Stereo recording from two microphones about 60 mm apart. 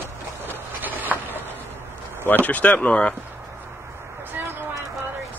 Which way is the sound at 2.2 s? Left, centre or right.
Left.